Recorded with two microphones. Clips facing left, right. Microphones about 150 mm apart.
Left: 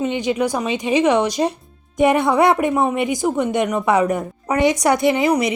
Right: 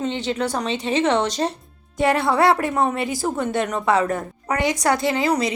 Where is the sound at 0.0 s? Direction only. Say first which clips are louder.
Left 4 dB; 15° left (ahead or behind).